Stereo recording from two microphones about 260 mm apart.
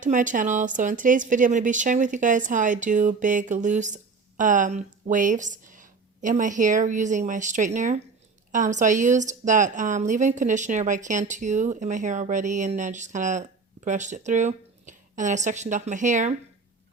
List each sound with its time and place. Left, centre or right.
0.0 s speech: right